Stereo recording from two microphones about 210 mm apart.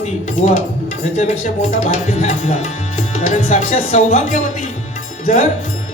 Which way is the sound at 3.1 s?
40° left (ahead or behind).